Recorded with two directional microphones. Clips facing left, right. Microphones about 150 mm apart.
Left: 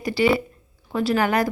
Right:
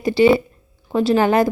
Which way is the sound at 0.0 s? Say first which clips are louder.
Right 6 dB; 25° right (ahead or behind).